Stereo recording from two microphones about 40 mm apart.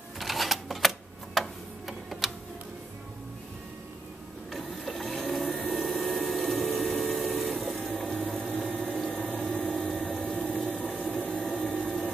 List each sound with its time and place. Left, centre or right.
0.2 s camera: centre
4.5 s printer: centre
5.8 s pump: centre
7.0 s a sound: centre
8.4 s a sound: left
8.7 s pump: centre
9.4 s a sound: centre
10.2 s pump: left
11.5 s vacuum cleaner: left